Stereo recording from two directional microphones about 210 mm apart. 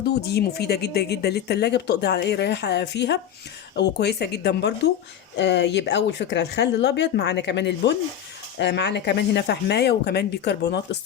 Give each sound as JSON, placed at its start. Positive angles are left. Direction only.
{"t": 0.1, "sound": "speech", "side_deg": 50}